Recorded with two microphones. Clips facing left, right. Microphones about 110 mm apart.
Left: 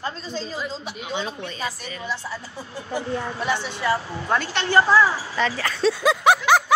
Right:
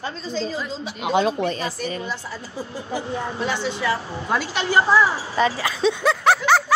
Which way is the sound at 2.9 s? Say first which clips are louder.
Left 1 dB; 15° right (ahead or behind).